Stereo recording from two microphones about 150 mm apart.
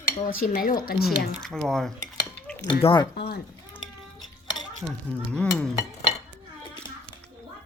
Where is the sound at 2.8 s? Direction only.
35° left (ahead or behind).